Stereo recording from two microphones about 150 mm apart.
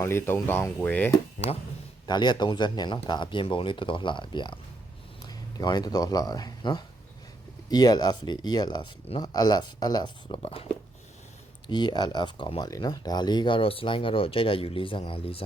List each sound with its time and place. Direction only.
0.0 s speech: 15° left (ahead or behind)
2.0 s speech: 30° left (ahead or behind)
11.7 s speech: 30° left (ahead or behind)